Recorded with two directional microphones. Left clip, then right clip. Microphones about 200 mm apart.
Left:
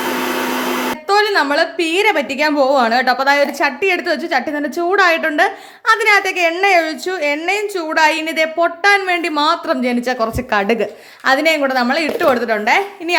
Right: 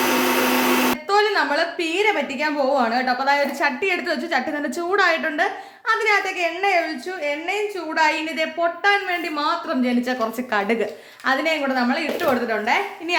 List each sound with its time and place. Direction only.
1.1 s a woman's voice: 40° left (ahead or behind)
11.3 s a woman's voice: 40° left (ahead or behind)